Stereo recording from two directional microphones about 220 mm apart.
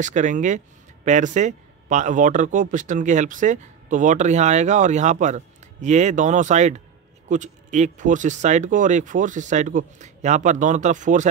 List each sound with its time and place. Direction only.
0.0 s speech: 35° right (ahead or behind)